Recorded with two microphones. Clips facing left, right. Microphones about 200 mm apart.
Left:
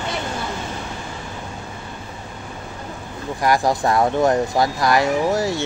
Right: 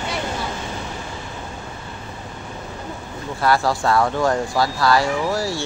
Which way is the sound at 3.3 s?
15° left (ahead or behind).